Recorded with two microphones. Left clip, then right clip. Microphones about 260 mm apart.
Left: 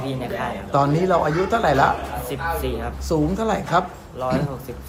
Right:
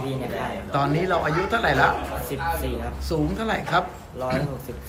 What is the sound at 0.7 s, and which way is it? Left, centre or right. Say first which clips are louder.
A man's voice: left 4 dB; centre.